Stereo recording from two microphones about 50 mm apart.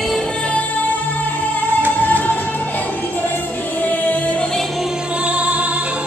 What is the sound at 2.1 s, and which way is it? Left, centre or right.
Music, left.